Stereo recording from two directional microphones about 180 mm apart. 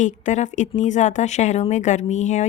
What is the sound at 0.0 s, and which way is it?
Speech, 45° left (ahead or behind).